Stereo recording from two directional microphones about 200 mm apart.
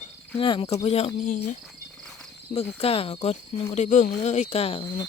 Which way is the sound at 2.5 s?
30° left (ahead or behind).